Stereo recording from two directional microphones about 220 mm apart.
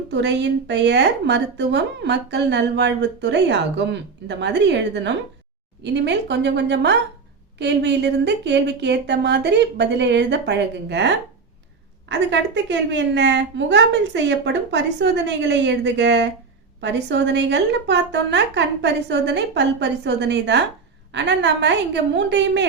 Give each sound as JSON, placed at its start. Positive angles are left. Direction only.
{"t": 0.1, "sound": "a woman's voice", "side_deg": -55}